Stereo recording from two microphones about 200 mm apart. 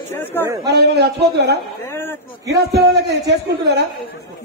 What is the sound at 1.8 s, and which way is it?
Speech, 10° left (ahead or behind).